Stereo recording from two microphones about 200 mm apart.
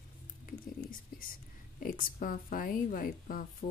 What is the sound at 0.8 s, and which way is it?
Speech, 45° left (ahead or behind).